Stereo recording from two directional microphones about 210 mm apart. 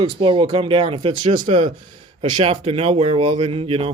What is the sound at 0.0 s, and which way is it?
Speech, 25° right (ahead or behind).